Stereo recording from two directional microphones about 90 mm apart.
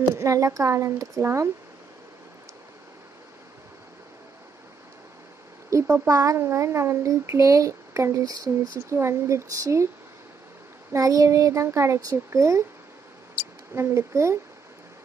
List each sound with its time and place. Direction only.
0.1 s speech: 35° right (ahead or behind)
5.7 s speech: 35° right (ahead or behind)
10.9 s speech: 40° right (ahead or behind)
13.7 s speech: 30° right (ahead or behind)